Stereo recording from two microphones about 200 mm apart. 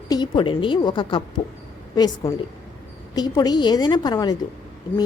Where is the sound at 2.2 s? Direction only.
20° left (ahead or behind).